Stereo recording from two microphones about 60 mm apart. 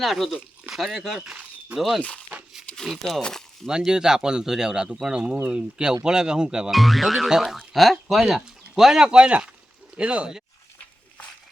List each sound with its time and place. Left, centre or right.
0.0 s speech: centre
3.2 s speech: centre
3.7 s speech: centre
6.7 s speech: centre
9.0 s speech: centre